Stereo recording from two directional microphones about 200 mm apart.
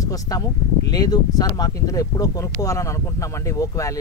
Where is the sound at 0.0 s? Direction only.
15° left (ahead or behind).